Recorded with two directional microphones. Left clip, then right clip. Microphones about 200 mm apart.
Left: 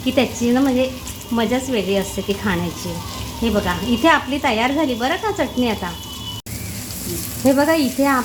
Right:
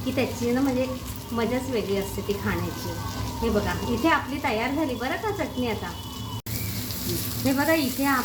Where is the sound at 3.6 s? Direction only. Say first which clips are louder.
Left 8 dB; 50° left (ahead or behind).